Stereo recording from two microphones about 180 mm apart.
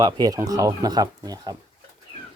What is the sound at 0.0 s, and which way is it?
Speech, 20° right (ahead or behind).